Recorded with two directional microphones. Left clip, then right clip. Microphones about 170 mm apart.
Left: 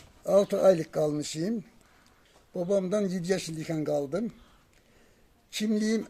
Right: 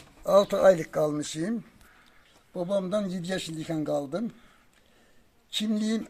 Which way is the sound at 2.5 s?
30° left (ahead or behind).